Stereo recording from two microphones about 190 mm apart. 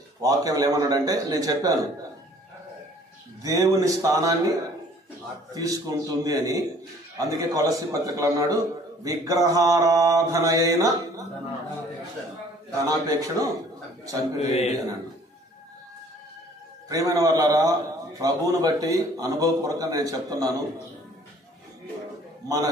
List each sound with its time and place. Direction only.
0.2 s a man's voice: 20° right (ahead or behind)
3.4 s mantra: 20° right (ahead or behind)
5.5 s a man's voice: 20° right (ahead or behind)
7.2 s mantra: 20° right (ahead or behind)
12.7 s a man's voice: 20° right (ahead or behind)
14.5 s speech: 35° left (ahead or behind)
16.9 s a man's voice: 20° right (ahead or behind)